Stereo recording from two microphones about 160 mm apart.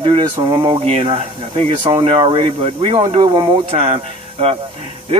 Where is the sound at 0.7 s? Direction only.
35° right (ahead or behind).